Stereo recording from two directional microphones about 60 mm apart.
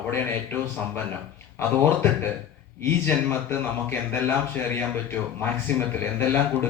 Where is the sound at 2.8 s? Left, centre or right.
Left.